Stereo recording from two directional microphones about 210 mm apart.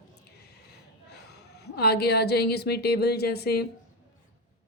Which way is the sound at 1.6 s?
50° left (ahead or behind).